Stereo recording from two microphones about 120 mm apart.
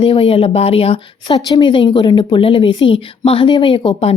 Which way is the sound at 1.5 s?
40° left (ahead or behind).